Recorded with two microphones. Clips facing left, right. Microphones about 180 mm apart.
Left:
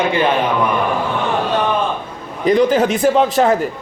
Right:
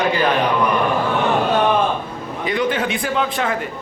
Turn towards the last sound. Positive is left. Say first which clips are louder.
# left 8 dB
turn(degrees=40)  # may be behind; listen again after turning